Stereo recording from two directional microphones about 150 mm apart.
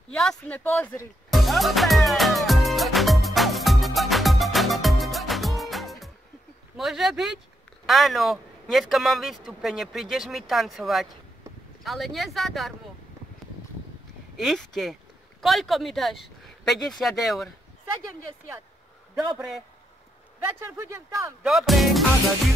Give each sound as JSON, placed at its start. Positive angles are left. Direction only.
{"t": 0.1, "sound": "speech", "side_deg": 5}
{"t": 1.3, "sound": "music", "side_deg": 0}
{"t": 6.8, "sound": "speech", "side_deg": 0}
{"t": 14.3, "sound": "speech", "side_deg": 0}
{"t": 19.1, "sound": "speech", "side_deg": 0}
{"t": 20.7, "sound": "speech", "side_deg": -20}
{"t": 21.5, "sound": "speech", "side_deg": 0}